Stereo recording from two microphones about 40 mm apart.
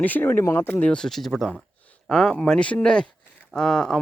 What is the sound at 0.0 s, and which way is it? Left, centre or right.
Speech, left.